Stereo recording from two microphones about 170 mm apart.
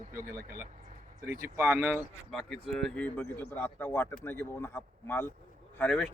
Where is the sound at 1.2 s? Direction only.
60° right (ahead or behind).